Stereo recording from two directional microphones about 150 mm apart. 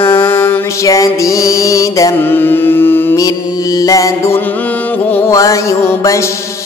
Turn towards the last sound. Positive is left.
turn(degrees=20)  # may be behind; listen again after turning